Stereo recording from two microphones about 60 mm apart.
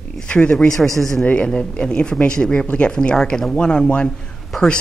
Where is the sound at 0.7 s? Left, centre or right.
Centre.